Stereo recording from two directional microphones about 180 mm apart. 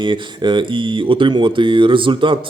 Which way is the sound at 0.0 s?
25° right (ahead or behind).